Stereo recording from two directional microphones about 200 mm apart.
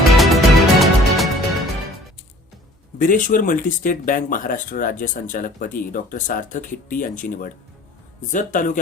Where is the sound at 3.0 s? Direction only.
40° left (ahead or behind).